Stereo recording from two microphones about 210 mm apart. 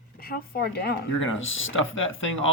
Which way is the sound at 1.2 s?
70° left (ahead or behind).